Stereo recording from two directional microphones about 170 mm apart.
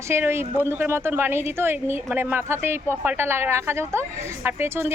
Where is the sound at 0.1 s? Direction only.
15° right (ahead or behind).